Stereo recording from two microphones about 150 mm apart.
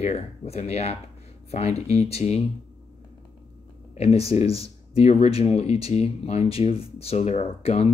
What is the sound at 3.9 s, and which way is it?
Speech, 45° left (ahead or behind).